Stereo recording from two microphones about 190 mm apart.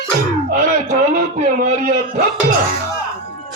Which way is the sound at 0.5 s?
45° right (ahead or behind).